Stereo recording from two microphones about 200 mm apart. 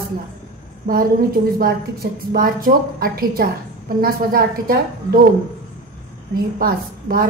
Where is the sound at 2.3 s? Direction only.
45° right (ahead or behind).